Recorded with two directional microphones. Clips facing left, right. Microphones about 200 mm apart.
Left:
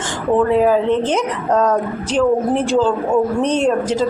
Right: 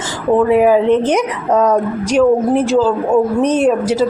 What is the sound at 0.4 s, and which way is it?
A woman's voice, 10° right (ahead or behind).